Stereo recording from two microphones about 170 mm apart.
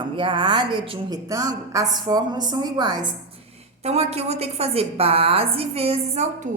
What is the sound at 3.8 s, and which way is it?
A woman's voice, 40° right (ahead or behind).